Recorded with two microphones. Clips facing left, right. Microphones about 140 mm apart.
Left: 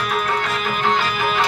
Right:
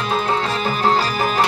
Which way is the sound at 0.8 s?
35° right (ahead or behind).